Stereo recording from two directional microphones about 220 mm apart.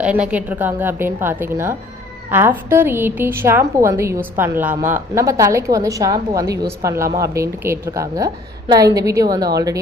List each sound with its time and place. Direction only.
0.0 s a woman's voice: 5° right (ahead or behind)